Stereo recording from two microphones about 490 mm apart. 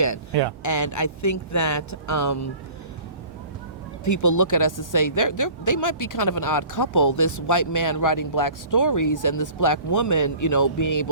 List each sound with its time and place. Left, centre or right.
0.6 s speech: left
4.0 s speech: left